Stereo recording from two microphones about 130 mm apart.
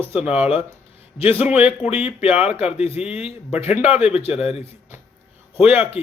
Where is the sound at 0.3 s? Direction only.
50° left (ahead or behind).